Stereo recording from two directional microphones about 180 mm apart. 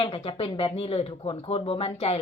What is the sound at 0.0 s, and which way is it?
A woman's voice, 30° left (ahead or behind).